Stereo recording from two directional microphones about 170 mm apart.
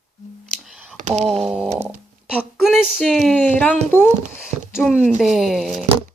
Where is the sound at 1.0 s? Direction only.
45° right (ahead or behind).